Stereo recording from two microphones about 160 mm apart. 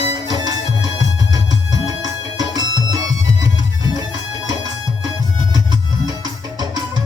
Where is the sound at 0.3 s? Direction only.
25° right (ahead or behind).